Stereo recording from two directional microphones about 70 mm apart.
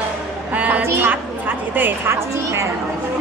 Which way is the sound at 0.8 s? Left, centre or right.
Right.